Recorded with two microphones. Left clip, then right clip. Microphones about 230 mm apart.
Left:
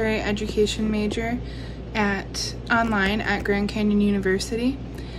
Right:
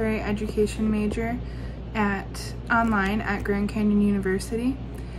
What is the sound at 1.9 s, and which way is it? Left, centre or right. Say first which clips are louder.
A woman's voice: left 2 dB; centre.